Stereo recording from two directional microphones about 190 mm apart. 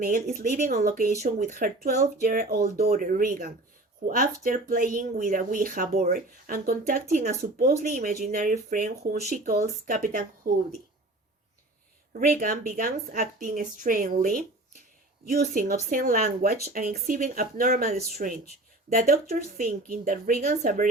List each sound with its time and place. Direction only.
0.0 s speech: 50° right (ahead or behind)
12.2 s speech: 50° right (ahead or behind)